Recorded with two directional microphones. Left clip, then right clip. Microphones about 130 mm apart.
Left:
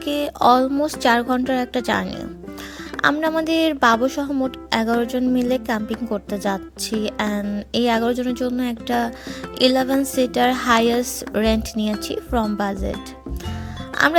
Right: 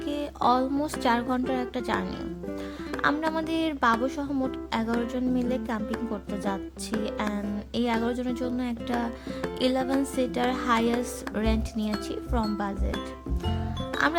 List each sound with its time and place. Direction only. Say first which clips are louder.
0.0 s speech: left 9 dB; 55° left (ahead or behind)
6.9 s speech: left 6 dB; 5° right (ahead or behind)
7.3 s speech: left 8 dB; 45° left (ahead or behind)